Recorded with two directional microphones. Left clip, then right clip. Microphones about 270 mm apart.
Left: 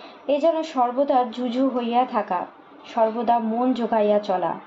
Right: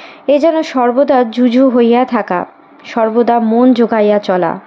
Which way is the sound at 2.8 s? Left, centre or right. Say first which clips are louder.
Right 9 dB; right.